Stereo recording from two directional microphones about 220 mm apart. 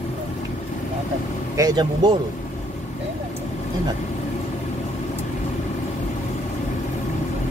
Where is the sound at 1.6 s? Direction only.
15° right (ahead or behind).